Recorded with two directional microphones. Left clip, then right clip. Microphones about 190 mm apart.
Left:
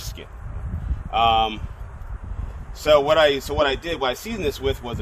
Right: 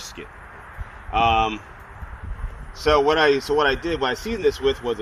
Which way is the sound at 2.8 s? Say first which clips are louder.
Left 1 dB; 35° left (ahead or behind).